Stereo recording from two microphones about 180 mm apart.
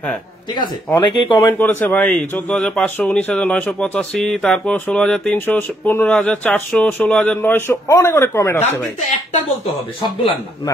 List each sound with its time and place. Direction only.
0.9 s a man's voice: 15° left (ahead or behind)
10.0 s a man's voice: 25° left (ahead or behind)